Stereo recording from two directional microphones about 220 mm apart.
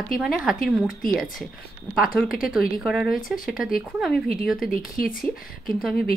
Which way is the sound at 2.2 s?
40° left (ahead or behind).